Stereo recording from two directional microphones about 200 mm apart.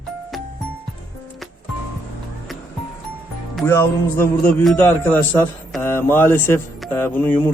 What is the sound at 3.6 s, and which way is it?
A man's voice, 10° left (ahead or behind).